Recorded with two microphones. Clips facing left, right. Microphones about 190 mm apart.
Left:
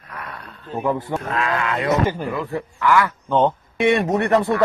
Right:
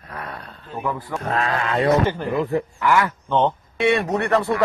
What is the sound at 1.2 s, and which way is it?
Mantra, 35° right (ahead or behind).